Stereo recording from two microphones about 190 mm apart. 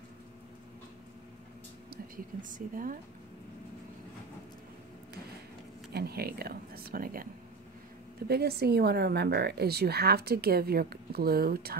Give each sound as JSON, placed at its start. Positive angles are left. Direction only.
{"t": 2.5, "sound": "speech", "side_deg": -45}
{"t": 5.9, "sound": "speech", "side_deg": -55}
{"t": 8.3, "sound": "a woman's voice", "side_deg": -55}